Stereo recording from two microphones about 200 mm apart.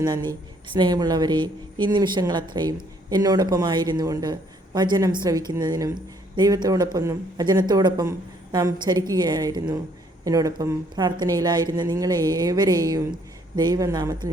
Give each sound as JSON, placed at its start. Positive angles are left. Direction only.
{"t": 0.0, "sound": "a woman's voice", "side_deg": -20}